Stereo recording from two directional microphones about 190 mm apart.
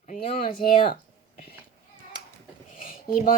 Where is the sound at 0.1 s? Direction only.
45° left (ahead or behind).